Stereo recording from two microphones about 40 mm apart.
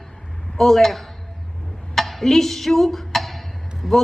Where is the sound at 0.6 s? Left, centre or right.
Centre.